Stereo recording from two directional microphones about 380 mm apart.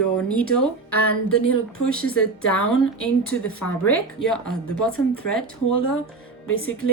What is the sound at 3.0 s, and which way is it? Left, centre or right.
Speech, centre.